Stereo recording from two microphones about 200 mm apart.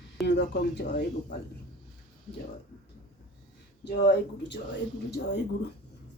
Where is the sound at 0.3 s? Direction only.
60° left (ahead or behind).